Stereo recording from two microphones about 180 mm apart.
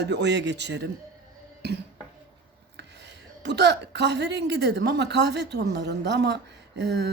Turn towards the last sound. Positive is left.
turn(degrees=-70)  # may be behind; listen again after turning